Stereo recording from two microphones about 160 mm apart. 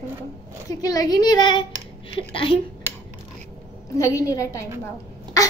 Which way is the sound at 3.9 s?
20° left (ahead or behind).